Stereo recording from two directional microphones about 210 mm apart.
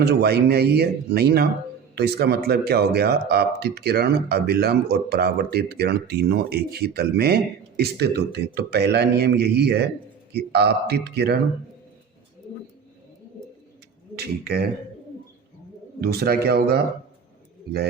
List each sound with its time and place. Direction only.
0.0 s speech: 50° right (ahead or behind)
14.2 s speech: 50° right (ahead or behind)
16.0 s speech: 45° right (ahead or behind)